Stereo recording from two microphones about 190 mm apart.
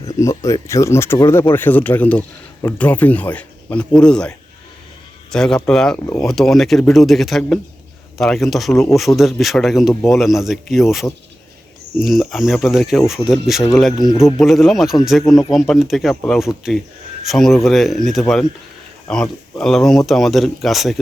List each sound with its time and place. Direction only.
0.1 s speech: 15° left (ahead or behind); by 10.8 s centre (ahead or behind)
11.9 s speech: centre (ahead or behind)
15.2 s a man's voice: 20° left (ahead or behind)
15.5 s speech: centre (ahead or behind)